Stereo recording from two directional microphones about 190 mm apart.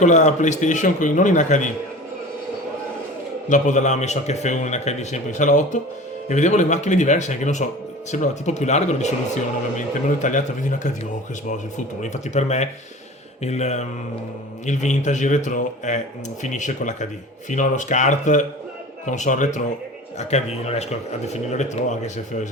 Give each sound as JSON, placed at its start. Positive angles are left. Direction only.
{"t": 0.0, "sound": "speech", "side_deg": 40}
{"t": 3.5, "sound": "speech", "side_deg": 40}